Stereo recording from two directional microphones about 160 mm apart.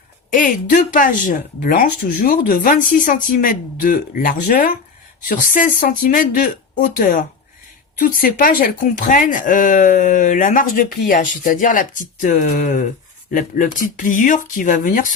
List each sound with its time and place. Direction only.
0.3 s speech: 60° left (ahead or behind)